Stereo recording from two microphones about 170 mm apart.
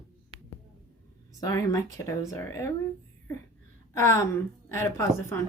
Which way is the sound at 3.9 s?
15° left (ahead or behind).